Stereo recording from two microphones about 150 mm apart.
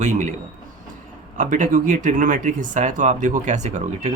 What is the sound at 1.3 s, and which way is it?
Speech, 55° right (ahead or behind).